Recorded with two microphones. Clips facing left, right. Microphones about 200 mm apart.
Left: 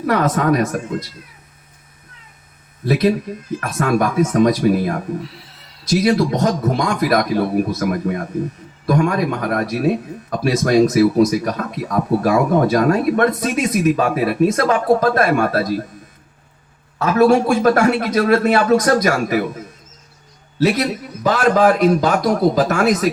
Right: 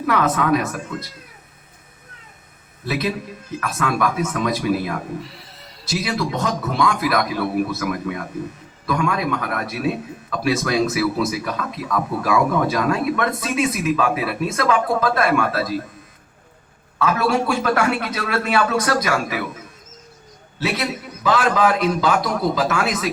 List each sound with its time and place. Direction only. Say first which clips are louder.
0.0 s speech: left 3 dB; 40° left (ahead or behind)
2.8 s a man's voice: left 7 dB; 40° left (ahead or behind)
5.2 s a sound: left 3 dB; centre (ahead or behind)
5.9 s speech: left 8 dB; 40° left (ahead or behind)
17.0 s a man's voice: left 6 dB; 45° left (ahead or behind)